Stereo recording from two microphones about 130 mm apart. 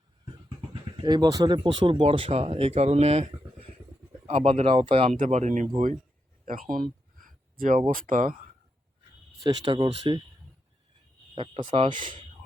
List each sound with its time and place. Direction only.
0.7 s speech: 35° right (ahead or behind); by 3.2 s 55° right (ahead or behind)
4.3 s speech: 50° right (ahead or behind)
5.1 s speech: 70° right (ahead or behind)
6.4 s speech: 90° right
9.5 s speech: 35° right (ahead or behind)
11.3 s speech: 40° right (ahead or behind)